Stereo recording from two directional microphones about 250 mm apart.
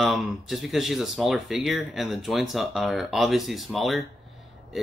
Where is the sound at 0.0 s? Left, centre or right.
Centre.